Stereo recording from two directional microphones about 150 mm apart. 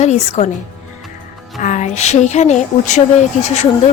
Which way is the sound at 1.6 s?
50° left (ahead or behind).